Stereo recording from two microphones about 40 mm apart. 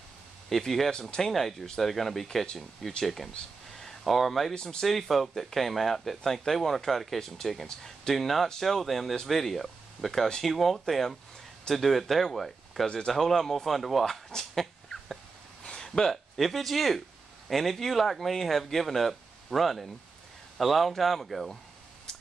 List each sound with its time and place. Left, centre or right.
0.5 s speech: centre
7.6 s speech: centre
8.1 s speech: centre
12.8 s speech: centre
14.3 s dog: centre
15.6 s a sound: centre
16.1 s speech: centre